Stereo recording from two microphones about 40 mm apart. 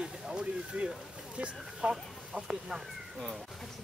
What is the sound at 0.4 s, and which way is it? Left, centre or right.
Speech, right.